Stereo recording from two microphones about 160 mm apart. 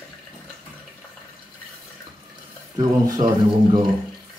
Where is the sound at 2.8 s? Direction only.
25° right (ahead or behind).